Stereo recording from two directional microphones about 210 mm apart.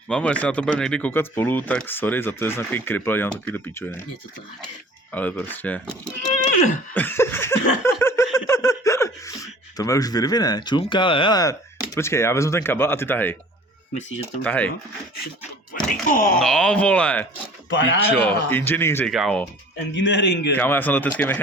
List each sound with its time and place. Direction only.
0.1 s speech: 5° left (ahead or behind)
5.1 s speech: 5° left (ahead or behind)
6.6 s speech: 35° left (ahead or behind)
6.9 s laughter: 10° left (ahead or behind)
8.4 s speech: 15° left (ahead or behind)
14.4 s speech: 5° left (ahead or behind)
15.7 s speech: 40° left (ahead or behind)
16.4 s speech: centre (ahead or behind)
17.7 s a man's voice: 60° left (ahead or behind)
18.5 s speech: 10° left (ahead or behind)
19.9 s a man's voice: 60° left (ahead or behind)
20.6 s speech: 10° left (ahead or behind)